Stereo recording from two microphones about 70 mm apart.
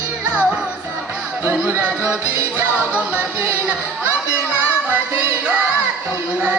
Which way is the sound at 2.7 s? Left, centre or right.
Left.